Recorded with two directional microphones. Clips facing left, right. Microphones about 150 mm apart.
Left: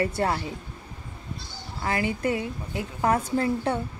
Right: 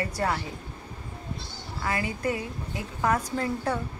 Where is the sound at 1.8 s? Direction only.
25° left (ahead or behind).